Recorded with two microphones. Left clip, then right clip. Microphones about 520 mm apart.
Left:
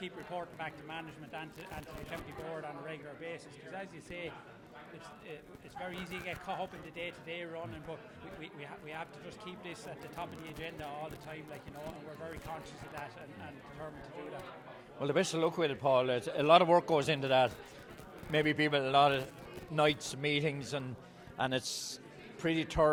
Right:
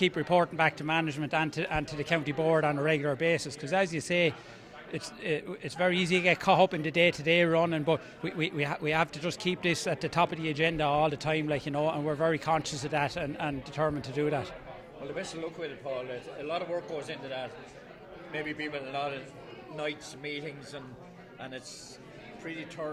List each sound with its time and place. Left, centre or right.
0.0 s a man's voice: right
15.1 s a man's voice: left
18.3 s a man's voice: left
21.3 s a man's voice: left
22.4 s a man's voice: left